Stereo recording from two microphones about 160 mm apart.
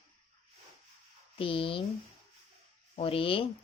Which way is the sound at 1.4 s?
35° left (ahead or behind).